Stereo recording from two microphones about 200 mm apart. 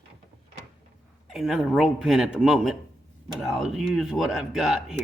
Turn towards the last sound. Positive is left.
turn(degrees=0)  # may be behind; listen again after turning